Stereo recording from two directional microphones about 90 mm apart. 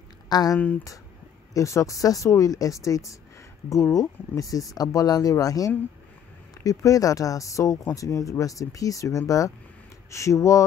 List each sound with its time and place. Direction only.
0.3 s speech: 45° left (ahead or behind)
1.5 s speech: 35° left (ahead or behind)